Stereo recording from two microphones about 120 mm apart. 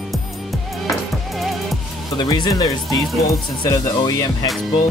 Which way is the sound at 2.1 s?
35° left (ahead or behind).